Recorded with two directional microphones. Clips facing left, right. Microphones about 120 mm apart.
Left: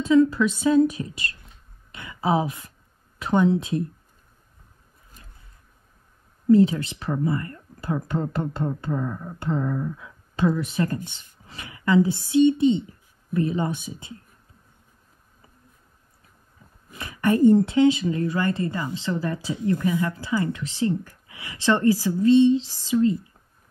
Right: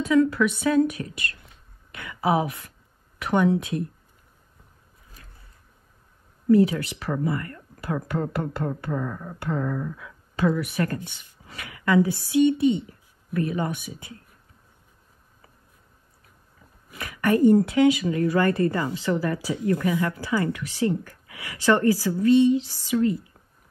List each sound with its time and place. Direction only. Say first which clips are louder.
0.0 s speech: left 2 dB; 25° left (ahead or behind)
6.5 s speech: left 1 dB; 30° left (ahead or behind)
11.4 s a sound: even; 30° left (ahead or behind)
12.3 s speech: left 2 dB; 25° left (ahead or behind)
17.0 s speech: left 1 dB; 25° left (ahead or behind)